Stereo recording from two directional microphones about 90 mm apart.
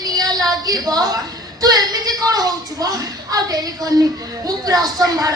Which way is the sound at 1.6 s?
45° right (ahead or behind).